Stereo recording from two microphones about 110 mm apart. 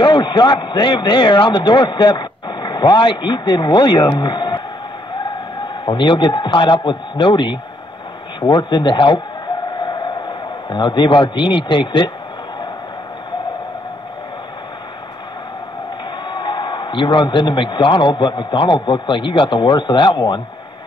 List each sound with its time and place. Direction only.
0.0 s a man's voice: 45° left (ahead or behind)
5.9 s a man's voice: 45° left (ahead or behind)
9.8 s a sound: 45° left (ahead or behind)
16.3 s a man's voice: 45° left (ahead or behind)